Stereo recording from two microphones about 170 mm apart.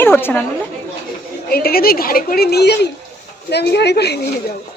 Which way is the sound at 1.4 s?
65° left (ahead or behind).